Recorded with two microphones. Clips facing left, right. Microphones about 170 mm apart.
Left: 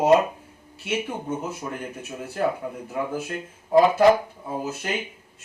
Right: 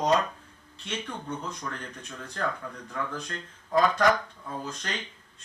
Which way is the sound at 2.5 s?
25° left (ahead or behind).